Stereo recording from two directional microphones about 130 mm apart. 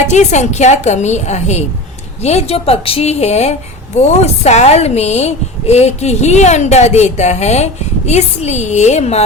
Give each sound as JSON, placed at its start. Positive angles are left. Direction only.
{"t": 0.1, "sound": "speech", "side_deg": 60}